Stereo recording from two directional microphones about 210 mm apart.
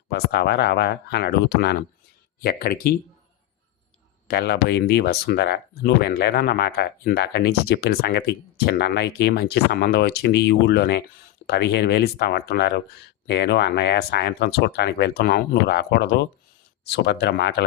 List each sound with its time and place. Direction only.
0.1 s speech: 50° left (ahead or behind)
4.3 s speech: 50° left (ahead or behind)